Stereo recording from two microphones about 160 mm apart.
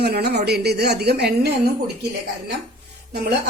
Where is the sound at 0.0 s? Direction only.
90° right.